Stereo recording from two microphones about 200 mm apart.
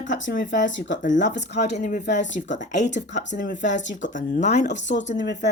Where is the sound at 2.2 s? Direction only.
65° left (ahead or behind).